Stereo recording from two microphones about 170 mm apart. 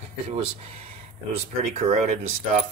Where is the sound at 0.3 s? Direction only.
35° right (ahead or behind).